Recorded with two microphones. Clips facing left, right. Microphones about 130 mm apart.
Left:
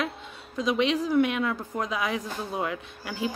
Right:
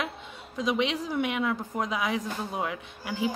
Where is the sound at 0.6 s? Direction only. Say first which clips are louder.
Left 3 dB; 20° right (ahead or behind).